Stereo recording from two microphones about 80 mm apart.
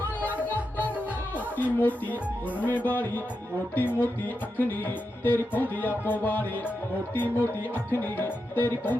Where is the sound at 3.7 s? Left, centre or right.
Left.